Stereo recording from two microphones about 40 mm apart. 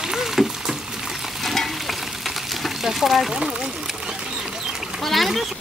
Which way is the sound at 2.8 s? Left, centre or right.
Centre.